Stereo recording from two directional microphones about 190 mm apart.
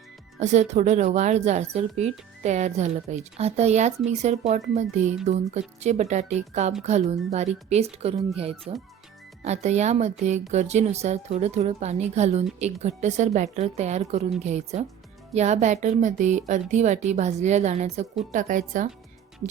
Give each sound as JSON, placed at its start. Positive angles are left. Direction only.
{"t": 0.3, "sound": "speech", "side_deg": -35}